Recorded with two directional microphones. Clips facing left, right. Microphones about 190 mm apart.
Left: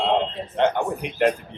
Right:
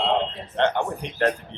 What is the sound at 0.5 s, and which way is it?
Speech, 10° left (ahead or behind).